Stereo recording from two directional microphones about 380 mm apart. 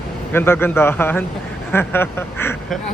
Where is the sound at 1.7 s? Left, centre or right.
Centre.